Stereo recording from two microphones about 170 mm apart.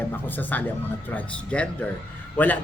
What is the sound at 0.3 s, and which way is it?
A man's voice, 10° left (ahead or behind).